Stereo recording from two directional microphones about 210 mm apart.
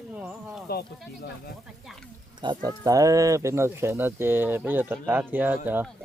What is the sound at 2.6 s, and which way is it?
Speech, 15° right (ahead or behind).